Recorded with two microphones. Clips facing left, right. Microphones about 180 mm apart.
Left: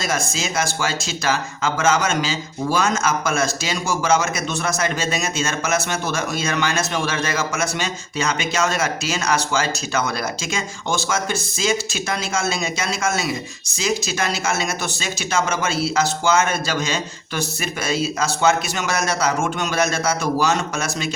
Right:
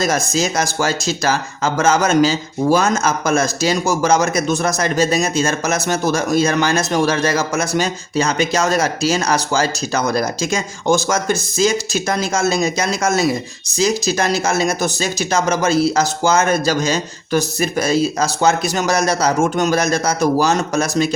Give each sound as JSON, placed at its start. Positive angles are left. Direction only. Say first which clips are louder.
{"t": 0.0, "sound": "speech", "louder": "right 6 dB", "side_deg": -40}